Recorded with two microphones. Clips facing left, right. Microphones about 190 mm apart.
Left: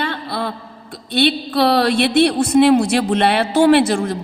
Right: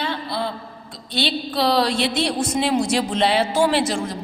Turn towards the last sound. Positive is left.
turn(degrees=60)  # may be behind; listen again after turning